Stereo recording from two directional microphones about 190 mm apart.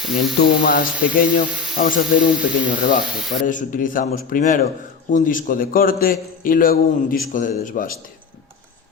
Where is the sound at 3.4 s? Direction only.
45° left (ahead or behind).